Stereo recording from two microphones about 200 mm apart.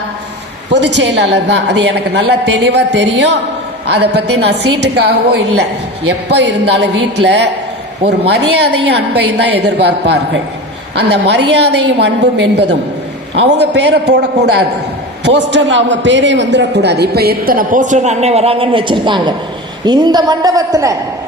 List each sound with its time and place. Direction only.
0.7 s a woman's voice: 60° right (ahead or behind); by 20.9 s 15° right (ahead or behind)